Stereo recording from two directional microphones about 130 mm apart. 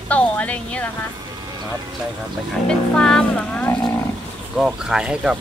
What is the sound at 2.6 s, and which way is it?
Speech, 5° left (ahead or behind).